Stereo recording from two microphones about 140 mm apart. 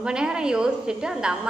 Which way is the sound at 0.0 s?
5° right (ahead or behind).